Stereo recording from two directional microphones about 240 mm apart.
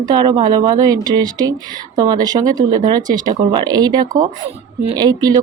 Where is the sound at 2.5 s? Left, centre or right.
Right.